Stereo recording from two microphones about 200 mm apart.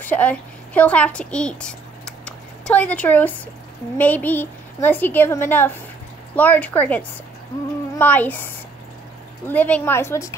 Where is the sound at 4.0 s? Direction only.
10° left (ahead or behind).